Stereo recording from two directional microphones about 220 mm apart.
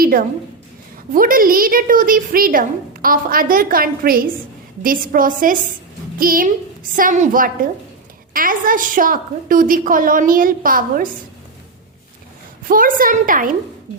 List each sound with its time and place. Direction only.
0.0 s a sound: 40° right (ahead or behind)
1.1 s a woman's voice: 40° right (ahead or behind)
12.6 s a woman's voice: 40° right (ahead or behind)